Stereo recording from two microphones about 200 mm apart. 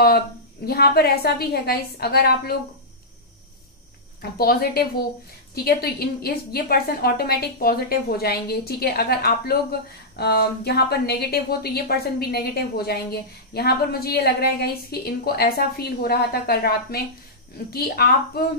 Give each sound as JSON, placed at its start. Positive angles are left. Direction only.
{"t": 0.7, "sound": "a woman's voice", "side_deg": 50}
{"t": 4.2, "sound": "a woman's voice", "side_deg": 50}